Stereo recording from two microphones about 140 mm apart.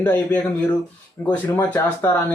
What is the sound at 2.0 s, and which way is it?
Speech, 10° left (ahead or behind).